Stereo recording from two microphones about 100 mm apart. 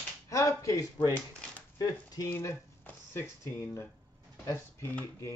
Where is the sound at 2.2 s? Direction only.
25° left (ahead or behind).